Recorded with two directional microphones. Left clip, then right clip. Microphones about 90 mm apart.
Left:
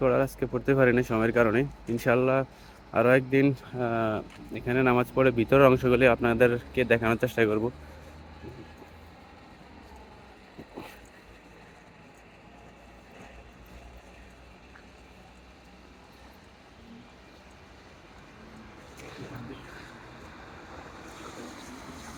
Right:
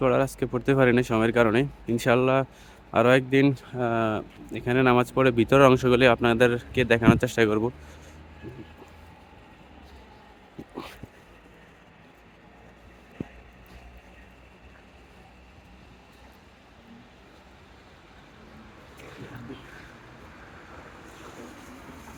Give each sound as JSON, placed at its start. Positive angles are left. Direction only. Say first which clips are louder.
{"t": 0.0, "sound": "speech", "louder": "right 2 dB", "side_deg": -75}
{"t": 2.9, "sound": "speech", "louder": "right 2 dB", "side_deg": -80}
{"t": 4.5, "sound": "speech", "louder": "right 3 dB", "side_deg": -90}
{"t": 5.5, "sound": "speech", "louder": "right 2 dB", "side_deg": -55}
{"t": 5.9, "sound": "speech", "louder": "right 2 dB", "side_deg": -90}
{"t": 7.4, "sound": "speech", "louder": "right 3 dB", "side_deg": -85}
{"t": 19.0, "sound": "a sound", "louder": "even", "side_deg": 0}